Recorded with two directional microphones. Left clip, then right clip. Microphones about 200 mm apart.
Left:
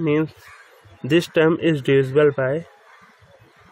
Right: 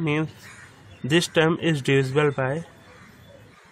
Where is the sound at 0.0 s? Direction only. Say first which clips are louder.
Left 5 dB; 5° left (ahead or behind).